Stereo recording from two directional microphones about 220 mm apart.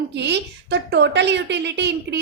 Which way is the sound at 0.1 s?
50° right (ahead or behind).